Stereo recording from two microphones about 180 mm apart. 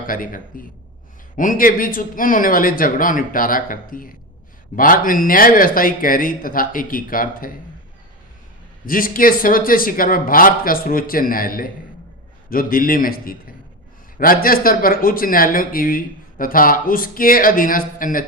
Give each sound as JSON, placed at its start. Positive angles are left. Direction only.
{"t": 0.1, "sound": "speech", "side_deg": 50}
{"t": 8.9, "sound": "speech", "side_deg": 50}